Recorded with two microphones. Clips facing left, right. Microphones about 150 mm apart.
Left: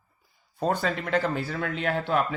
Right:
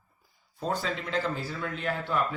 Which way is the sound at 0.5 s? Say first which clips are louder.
Left 5 dB; 60° left (ahead or behind).